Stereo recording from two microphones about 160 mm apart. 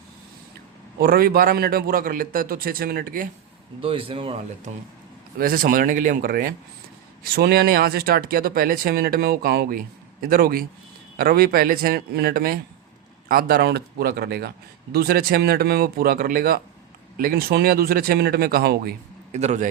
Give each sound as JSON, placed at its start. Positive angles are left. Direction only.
{"t": 0.9, "sound": "a man's voice", "side_deg": -70}
{"t": 3.8, "sound": "a man's voice", "side_deg": -35}
{"t": 5.4, "sound": "a man's voice", "side_deg": -65}
{"t": 7.3, "sound": "a man's voice", "side_deg": -75}
{"t": 19.3, "sound": "speech", "side_deg": -45}